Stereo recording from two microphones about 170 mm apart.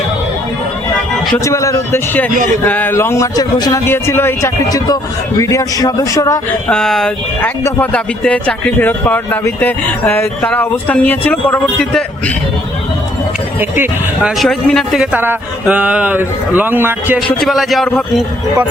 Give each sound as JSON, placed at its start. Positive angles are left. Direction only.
{"t": 1.5, "sound": "speech", "side_deg": 20}
{"t": 2.3, "sound": "speech", "side_deg": -50}
{"t": 2.6, "sound": "a man's voice", "side_deg": 10}
{"t": 6.7, "sound": "speech", "side_deg": 5}
{"t": 14.2, "sound": "speech", "side_deg": 0}
{"t": 17.2, "sound": "speech", "side_deg": 0}